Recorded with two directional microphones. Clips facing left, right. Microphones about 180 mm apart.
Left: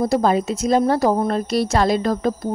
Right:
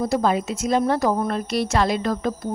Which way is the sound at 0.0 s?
35° left (ahead or behind).